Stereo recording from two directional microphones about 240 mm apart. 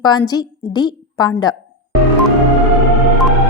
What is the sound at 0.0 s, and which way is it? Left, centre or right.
A woman's voice, centre.